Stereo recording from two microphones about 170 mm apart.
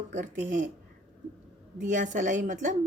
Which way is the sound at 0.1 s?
45° right (ahead or behind).